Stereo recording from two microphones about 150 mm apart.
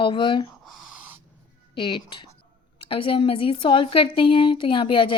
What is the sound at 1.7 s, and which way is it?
A woman's voice, 35° left (ahead or behind).